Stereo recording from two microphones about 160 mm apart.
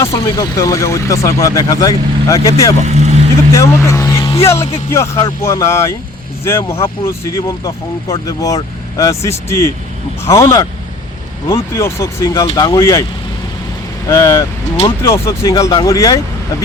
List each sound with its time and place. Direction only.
0.0 s speech: 20° left (ahead or behind)
2.8 s speech: 45° right (ahead or behind)
3.5 s speech: 20° left (ahead or behind)
14.1 s speech: 20° left (ahead or behind)